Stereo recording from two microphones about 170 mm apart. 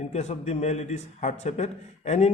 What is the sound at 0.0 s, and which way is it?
A man's voice, 40° left (ahead or behind).